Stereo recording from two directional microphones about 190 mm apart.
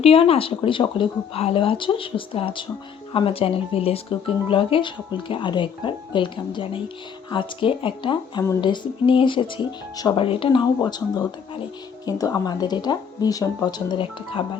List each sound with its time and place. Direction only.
0.0 s speech: 30° left (ahead or behind)